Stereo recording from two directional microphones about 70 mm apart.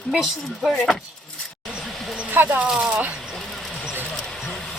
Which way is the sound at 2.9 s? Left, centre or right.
Centre.